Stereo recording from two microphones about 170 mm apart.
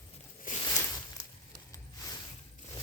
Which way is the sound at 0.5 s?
50° left (ahead or behind).